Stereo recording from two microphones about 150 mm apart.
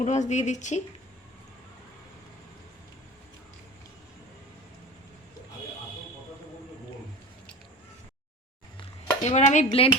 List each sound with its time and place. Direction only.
0.0 s a woman's voice: 50° left (ahead or behind)
8.8 s dishes: 40° left (ahead or behind)
9.4 s a woman's voice: 55° left (ahead or behind)
9.6 s a woman's voice: 40° left (ahead or behind)